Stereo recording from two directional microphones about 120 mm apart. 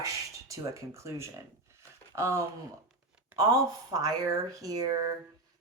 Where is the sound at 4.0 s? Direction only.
30° right (ahead or behind).